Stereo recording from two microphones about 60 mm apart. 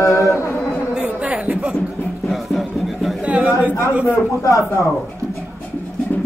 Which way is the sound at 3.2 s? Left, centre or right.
Right.